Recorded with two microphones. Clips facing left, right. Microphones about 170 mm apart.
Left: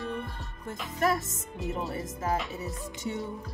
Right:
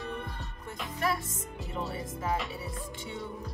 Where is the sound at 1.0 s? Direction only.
45° left (ahead or behind).